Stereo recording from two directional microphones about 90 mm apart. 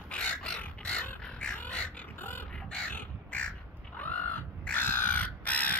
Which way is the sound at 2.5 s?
15° left (ahead or behind).